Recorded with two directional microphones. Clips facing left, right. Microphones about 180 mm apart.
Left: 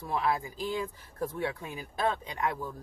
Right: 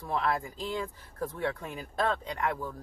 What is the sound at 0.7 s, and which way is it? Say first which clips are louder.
Speech: left 1 dB; 10° left (ahead or behind).